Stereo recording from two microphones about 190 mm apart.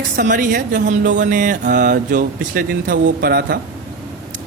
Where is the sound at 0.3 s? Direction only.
45° right (ahead or behind).